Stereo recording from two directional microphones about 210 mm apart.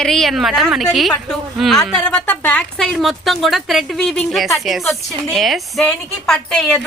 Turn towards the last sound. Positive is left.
turn(degrees=0)  # may be behind; listen again after turning